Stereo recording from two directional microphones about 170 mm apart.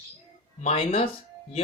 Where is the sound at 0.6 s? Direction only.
40° left (ahead or behind).